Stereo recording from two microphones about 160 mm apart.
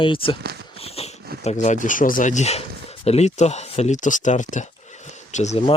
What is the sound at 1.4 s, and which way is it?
Speech, 50° left (ahead or behind).